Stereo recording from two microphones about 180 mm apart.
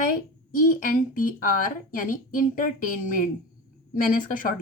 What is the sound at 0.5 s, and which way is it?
A woman's voice, 50° left (ahead or behind).